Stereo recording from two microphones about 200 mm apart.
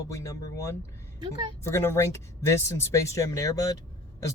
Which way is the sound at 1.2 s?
25° right (ahead or behind).